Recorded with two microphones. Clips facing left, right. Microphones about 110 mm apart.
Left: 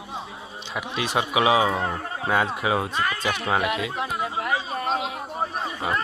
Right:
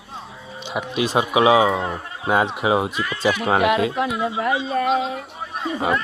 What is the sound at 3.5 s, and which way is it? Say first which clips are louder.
Speech: right 8 dB; 70° right (ahead or behind).